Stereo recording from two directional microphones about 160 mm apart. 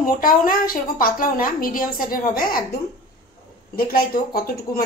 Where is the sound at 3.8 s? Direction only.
65° left (ahead or behind).